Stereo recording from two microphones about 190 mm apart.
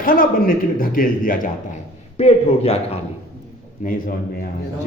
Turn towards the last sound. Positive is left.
turn(degrees=50)  # may be behind; listen again after turning